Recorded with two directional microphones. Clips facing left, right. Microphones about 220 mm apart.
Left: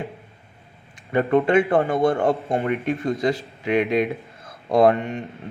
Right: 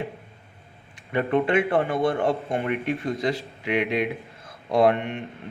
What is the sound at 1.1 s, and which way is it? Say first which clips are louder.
Speech: left 4 dB; 45° left (ahead or behind).